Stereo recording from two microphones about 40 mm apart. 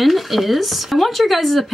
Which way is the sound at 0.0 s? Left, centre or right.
Centre.